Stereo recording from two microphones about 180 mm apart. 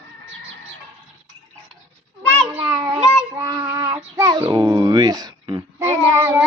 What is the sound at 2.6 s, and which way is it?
Child singing, 15° right (ahead or behind).